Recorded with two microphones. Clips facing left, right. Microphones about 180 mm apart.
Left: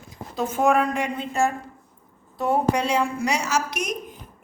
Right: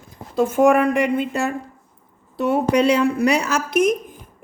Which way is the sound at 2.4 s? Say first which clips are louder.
Right 4 dB; 75° right (ahead or behind).